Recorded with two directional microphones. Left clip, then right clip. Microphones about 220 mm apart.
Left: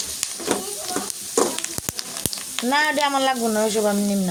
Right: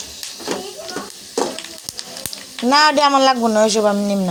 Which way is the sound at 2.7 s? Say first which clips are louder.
Right 7 dB; 25° right (ahead or behind).